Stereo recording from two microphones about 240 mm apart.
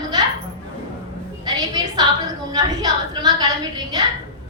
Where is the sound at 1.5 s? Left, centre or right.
Centre.